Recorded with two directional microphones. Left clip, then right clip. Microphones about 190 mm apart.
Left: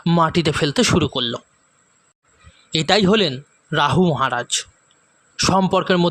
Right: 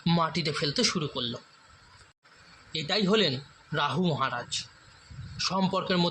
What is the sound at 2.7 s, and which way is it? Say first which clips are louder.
A man's voice: left 11 dB; 55° left (ahead or behind).